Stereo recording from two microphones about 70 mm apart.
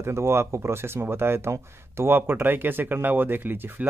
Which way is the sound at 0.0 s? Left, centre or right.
Right.